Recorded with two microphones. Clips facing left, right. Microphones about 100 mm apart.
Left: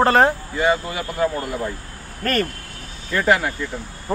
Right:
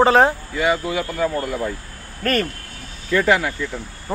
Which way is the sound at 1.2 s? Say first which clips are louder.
Left 2 dB; 15° left (ahead or behind).